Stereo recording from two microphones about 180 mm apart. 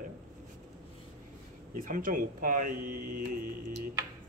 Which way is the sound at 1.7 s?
50° right (ahead or behind).